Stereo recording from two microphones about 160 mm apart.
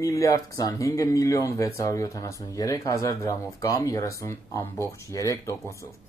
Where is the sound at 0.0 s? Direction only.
20° left (ahead or behind).